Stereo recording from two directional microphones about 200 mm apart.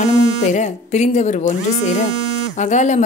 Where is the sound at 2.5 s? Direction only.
35° left (ahead or behind).